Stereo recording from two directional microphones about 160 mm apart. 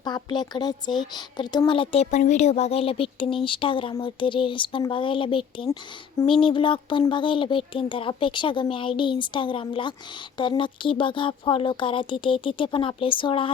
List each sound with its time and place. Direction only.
0.0 s speech: 25° left (ahead or behind)